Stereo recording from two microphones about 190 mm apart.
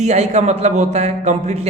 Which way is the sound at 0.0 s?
35° right (ahead or behind).